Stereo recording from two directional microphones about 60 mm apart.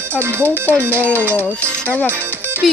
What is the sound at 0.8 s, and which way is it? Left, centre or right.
Speech, right.